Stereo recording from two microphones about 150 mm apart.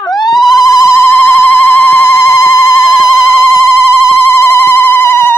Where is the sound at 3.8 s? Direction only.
20° left (ahead or behind).